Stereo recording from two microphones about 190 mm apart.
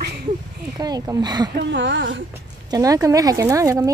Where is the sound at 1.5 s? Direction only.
70° right (ahead or behind).